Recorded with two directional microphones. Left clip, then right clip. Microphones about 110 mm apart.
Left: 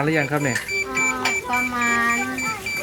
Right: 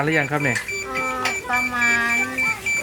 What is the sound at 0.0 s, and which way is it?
Speech, 10° right (ahead or behind).